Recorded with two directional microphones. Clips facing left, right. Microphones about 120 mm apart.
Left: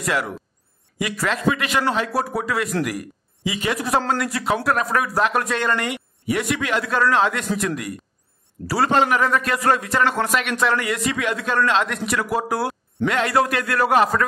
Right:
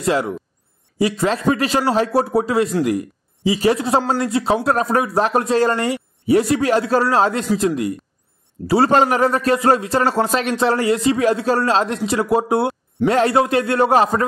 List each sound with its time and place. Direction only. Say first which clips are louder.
0.0 s speech: right 5 dB; 25° right (ahead or behind)